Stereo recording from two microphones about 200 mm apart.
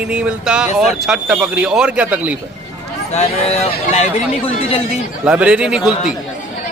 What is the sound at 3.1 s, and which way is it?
Speech, 35° left (ahead or behind).